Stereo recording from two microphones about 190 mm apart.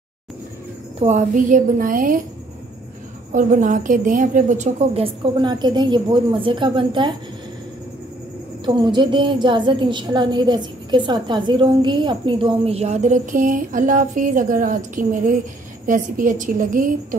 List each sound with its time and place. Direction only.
0.9 s a woman's voice: 40° right (ahead or behind)
3.3 s a woman's voice: 40° right (ahead or behind); by 7.2 s 25° right (ahead or behind)
8.6 s a woman's voice: 25° right (ahead or behind); by 16.9 s 45° right (ahead or behind)